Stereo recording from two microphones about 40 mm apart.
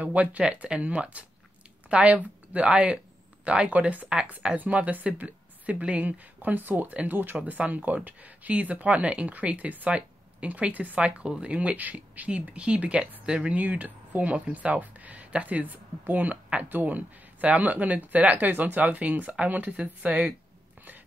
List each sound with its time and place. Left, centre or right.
0.0 s speech: right
4.4 s speech: right
7.4 s speech: right
11.7 s speech: right
12.5 s speech: right
18.5 s speech: right